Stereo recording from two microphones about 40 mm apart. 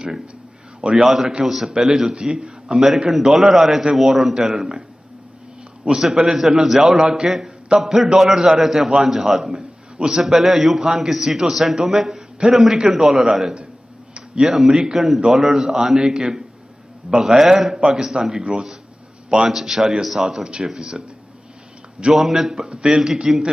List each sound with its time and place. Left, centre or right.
0.7 s a man's voice: right
1.0 s a man's voice: centre
6.0 s a man's voice: centre
9.9 s a man's voice: right
10.2 s a man's voice: centre
14.1 s a sound: right
14.5 s a man's voice: centre
20.4 s a man's voice: right
22.1 s a man's voice: centre